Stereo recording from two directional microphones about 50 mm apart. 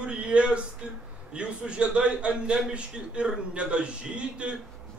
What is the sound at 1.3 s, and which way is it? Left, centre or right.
A man's voice, right.